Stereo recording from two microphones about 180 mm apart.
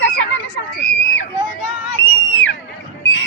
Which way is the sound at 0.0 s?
75° left (ahead or behind).